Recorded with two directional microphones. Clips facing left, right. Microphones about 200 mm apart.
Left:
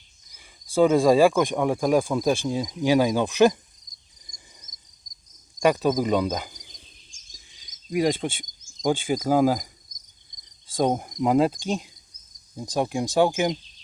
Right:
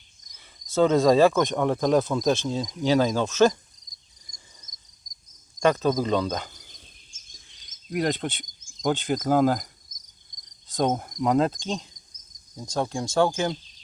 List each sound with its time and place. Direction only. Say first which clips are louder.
0.3 s cricket: left 1 dB; 10° left (ahead or behind)
5.5 s speech: left 1 dB; 10° left (ahead or behind)
7.5 s a sound: left 3 dB; 10° left (ahead or behind)
8.8 s cricket: left 1 dB; 10° left (ahead or behind)
10.8 s cricket: left 2 dB; 10° left (ahead or behind)